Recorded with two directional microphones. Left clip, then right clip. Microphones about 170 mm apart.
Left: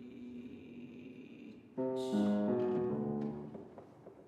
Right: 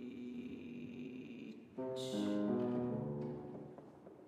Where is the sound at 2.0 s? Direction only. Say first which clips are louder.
Left 4 dB; 25° right (ahead or behind).